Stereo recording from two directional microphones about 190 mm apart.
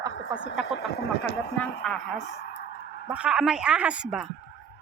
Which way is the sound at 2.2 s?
60° left (ahead or behind).